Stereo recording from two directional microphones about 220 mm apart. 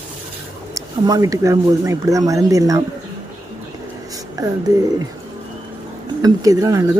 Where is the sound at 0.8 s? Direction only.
15° right (ahead or behind).